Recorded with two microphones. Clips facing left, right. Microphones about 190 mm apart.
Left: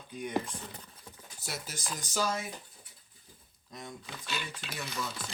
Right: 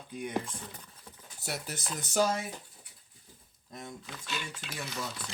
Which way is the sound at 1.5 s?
60° right (ahead or behind).